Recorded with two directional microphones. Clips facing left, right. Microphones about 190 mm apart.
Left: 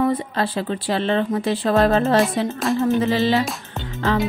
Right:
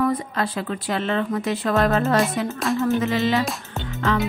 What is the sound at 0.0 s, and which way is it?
Speech, 30° left (ahead or behind).